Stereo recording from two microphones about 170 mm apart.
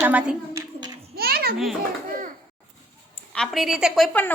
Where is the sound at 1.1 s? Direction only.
65° right (ahead or behind).